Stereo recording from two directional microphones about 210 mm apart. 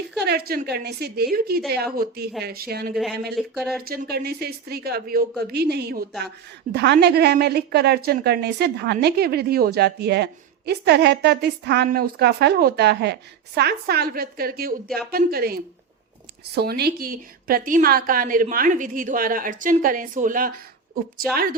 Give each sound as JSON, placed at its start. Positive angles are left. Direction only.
{"t": 0.2, "sound": "a woman's voice", "side_deg": -50}
{"t": 2.9, "sound": "speech", "side_deg": 0}
{"t": 3.8, "sound": "a woman's voice", "side_deg": -45}